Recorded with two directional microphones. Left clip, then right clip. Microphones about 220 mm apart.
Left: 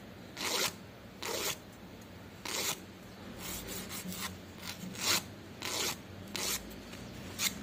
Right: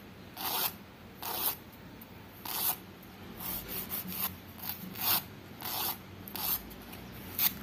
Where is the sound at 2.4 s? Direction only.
10° right (ahead or behind).